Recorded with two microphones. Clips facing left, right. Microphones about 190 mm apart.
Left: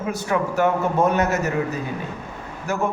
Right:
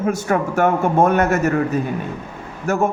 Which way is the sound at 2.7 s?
50° right (ahead or behind).